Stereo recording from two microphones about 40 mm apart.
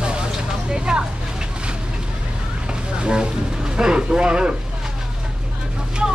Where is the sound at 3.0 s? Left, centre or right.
Right.